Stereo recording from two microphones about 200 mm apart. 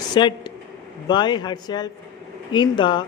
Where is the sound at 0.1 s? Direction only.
25° left (ahead or behind).